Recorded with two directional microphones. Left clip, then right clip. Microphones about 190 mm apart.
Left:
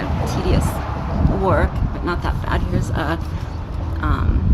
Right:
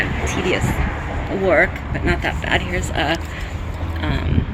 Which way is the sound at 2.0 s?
10° left (ahead or behind).